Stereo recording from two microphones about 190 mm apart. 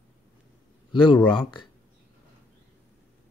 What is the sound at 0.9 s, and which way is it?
Speech, 25° left (ahead or behind).